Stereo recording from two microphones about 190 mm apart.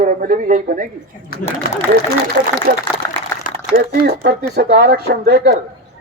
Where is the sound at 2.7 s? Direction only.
50° right (ahead or behind).